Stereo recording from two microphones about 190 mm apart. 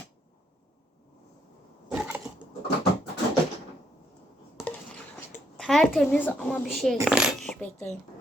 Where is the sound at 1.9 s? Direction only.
5° right (ahead or behind).